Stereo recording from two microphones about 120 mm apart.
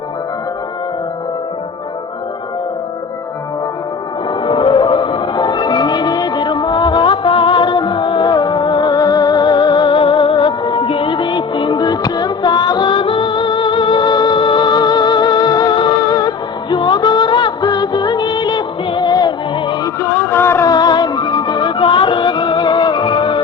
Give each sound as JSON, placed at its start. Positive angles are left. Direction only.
{"t": 4.4, "sound": "music", "side_deg": 45}
{"t": 20.0, "sound": "music", "side_deg": 20}
{"t": 20.7, "sound": "music", "side_deg": 35}